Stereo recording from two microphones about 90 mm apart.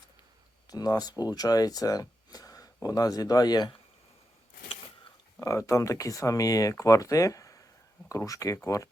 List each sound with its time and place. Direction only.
0.7 s speech: 45° left (ahead or behind)
5.4 s speech: 35° left (ahead or behind)